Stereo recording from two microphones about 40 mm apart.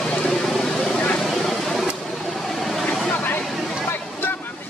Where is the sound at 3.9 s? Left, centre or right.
Left.